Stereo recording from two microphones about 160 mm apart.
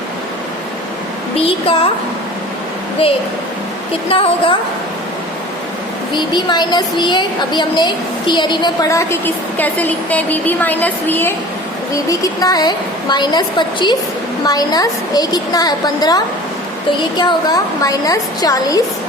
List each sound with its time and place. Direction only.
1.4 s a woman's voice: 35° left (ahead or behind)
3.0 s a woman's voice: 35° left (ahead or behind)
6.1 s a woman's voice: 30° left (ahead or behind)